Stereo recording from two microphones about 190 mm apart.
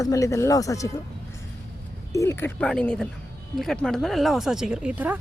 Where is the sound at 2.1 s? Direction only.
10° left (ahead or behind); by 5.1 s 5° right (ahead or behind).